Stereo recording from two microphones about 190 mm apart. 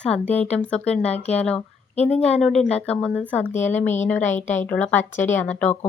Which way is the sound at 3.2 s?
5° left (ahead or behind).